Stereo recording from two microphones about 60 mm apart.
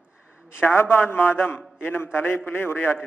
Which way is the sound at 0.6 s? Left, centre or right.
Left.